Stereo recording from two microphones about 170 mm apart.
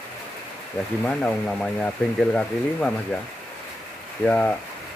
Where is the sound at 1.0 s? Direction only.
10° left (ahead or behind).